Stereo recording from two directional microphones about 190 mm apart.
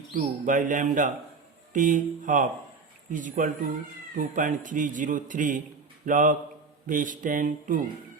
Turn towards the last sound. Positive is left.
turn(degrees=-45)  # may be behind; listen again after turning